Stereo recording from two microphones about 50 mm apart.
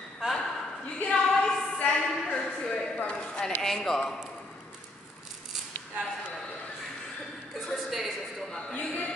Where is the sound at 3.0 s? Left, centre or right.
Left.